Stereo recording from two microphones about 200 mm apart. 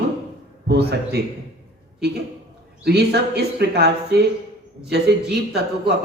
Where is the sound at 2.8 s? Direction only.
55° right (ahead or behind).